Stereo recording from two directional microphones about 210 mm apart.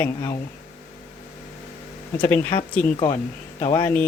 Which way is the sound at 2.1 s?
10° left (ahead or behind).